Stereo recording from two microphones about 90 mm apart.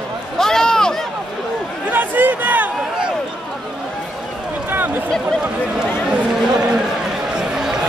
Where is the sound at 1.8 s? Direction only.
20° right (ahead or behind).